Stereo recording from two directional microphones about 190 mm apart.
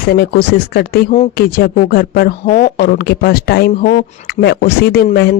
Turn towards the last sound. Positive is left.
turn(degrees=55)  # may be behind; listen again after turning